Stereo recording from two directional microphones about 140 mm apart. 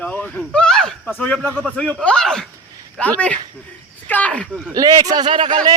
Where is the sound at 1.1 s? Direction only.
10° left (ahead or behind).